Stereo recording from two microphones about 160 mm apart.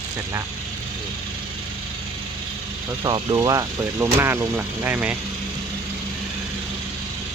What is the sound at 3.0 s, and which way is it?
Speech, 25° right (ahead or behind).